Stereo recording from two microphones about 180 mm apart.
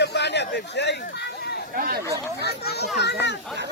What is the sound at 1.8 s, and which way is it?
Speech, 55° right (ahead or behind).